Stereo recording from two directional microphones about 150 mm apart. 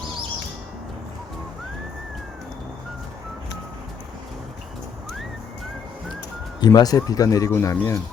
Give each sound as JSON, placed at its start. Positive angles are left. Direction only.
{"t": 6.6, "sound": "speech", "side_deg": 25}